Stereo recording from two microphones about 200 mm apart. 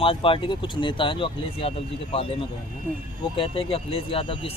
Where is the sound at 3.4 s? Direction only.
25° left (ahead or behind).